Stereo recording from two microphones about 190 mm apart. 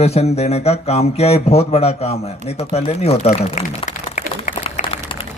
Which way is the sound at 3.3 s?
35° left (ahead or behind).